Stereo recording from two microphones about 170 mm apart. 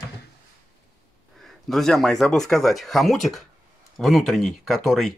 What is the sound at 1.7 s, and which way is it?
Speech, centre (ahead or behind).